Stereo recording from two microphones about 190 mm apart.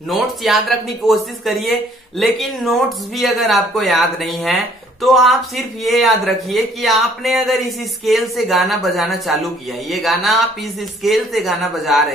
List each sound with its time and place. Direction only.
0.1 s a man's voice: centre (ahead or behind)